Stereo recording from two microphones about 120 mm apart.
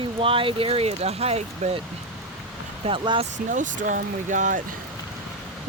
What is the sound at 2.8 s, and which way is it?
Speech, 50° right (ahead or behind).